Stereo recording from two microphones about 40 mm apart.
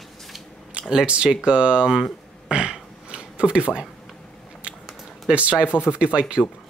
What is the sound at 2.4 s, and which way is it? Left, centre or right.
Throat clearing, right.